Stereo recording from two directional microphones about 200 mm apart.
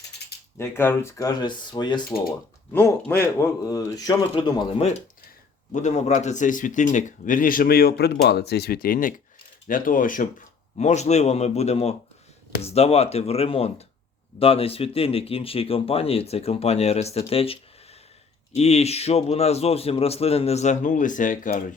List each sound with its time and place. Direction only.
0.6 s speech: 10° left (ahead or behind)
2.7 s a man's voice: 10° left (ahead or behind); by 21.6 s 40° left (ahead or behind)